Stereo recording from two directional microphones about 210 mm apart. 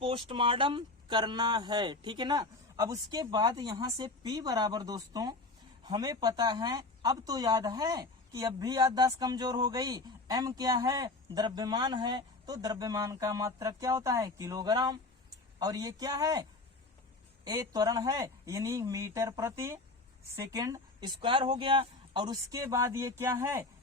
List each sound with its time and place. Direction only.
0.0 s speech: 25° right (ahead or behind)